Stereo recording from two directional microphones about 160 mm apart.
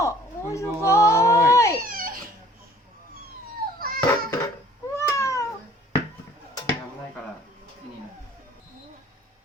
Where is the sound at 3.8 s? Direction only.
65° right (ahead or behind).